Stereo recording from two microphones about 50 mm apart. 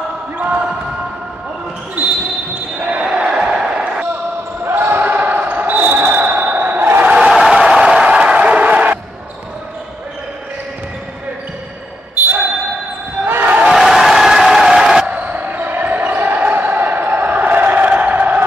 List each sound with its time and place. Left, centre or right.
0.4 s basketball bounce: right
2.8 s basketball bounce: centre
4.6 s basketball bounce: right
7.1 s crowd: centre
7.3 s a sound: centre; by 9.0 s right
13.2 s battle cry: right
13.7 s crowd: centre
15.0 s basketball bounce: right